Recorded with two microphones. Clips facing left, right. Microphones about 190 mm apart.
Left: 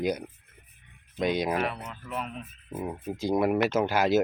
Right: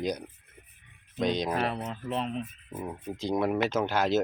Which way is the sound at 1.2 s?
10° left (ahead or behind).